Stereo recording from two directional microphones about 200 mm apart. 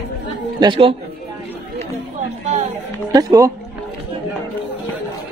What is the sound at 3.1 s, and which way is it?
Speech, 20° right (ahead or behind).